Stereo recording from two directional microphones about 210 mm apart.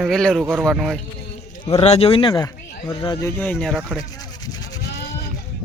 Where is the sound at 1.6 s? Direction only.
25° left (ahead or behind); by 4.0 s centre (ahead or behind).